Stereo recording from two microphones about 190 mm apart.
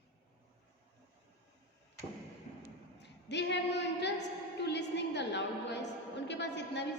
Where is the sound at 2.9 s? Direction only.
65° left (ahead or behind).